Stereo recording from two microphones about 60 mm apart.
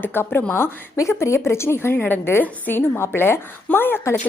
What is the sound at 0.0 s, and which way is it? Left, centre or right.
Speech, left.